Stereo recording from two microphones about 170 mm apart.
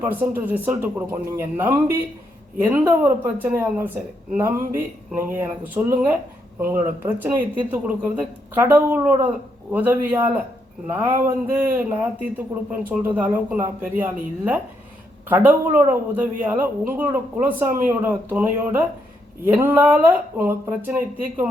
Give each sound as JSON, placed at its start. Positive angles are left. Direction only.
{"t": 0.0, "sound": "speech", "side_deg": -10}
{"t": 15.3, "sound": "speech", "side_deg": -10}